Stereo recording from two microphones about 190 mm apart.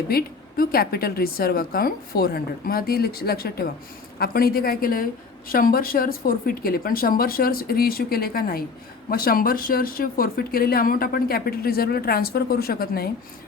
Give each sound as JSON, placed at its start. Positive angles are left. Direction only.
{"t": 0.1, "sound": "speech", "side_deg": 50}